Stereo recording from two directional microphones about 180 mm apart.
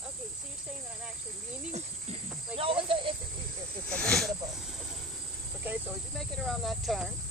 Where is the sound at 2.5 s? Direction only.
10° right (ahead or behind).